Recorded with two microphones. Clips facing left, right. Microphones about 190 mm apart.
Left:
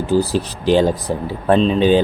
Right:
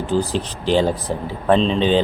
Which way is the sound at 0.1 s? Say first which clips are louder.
Left 4 dB; 10° left (ahead or behind).